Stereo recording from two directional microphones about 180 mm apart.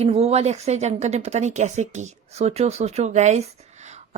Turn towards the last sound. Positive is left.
turn(degrees=-40)  # may be behind; listen again after turning